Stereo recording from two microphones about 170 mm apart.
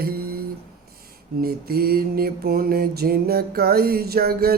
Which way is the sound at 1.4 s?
65° right (ahead or behind).